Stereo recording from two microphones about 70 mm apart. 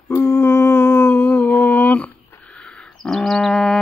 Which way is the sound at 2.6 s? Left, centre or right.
Centre.